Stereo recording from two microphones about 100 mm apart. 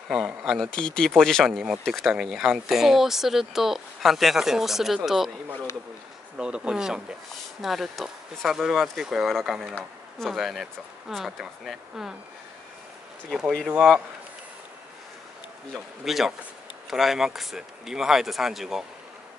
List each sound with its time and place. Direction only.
0.1 s speech: 5° right (ahead or behind)
0.6 s speech: 10° left (ahead or behind)
6.3 s speech: 10° right (ahead or behind)
13.3 s speech: centre (ahead or behind)
15.7 s speech: centre (ahead or behind)